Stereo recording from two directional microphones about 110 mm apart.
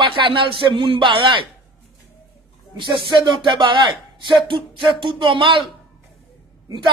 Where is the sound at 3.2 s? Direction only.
45° right (ahead or behind).